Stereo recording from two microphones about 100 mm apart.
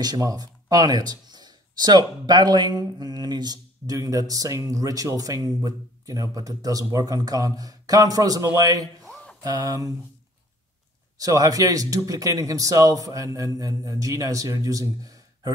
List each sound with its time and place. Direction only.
0.0 s speech: 40° right (ahead or behind)
9.0 s a sound: centre (ahead or behind)
9.4 s speech: 35° right (ahead or behind)
11.1 s speech: 35° right (ahead or behind)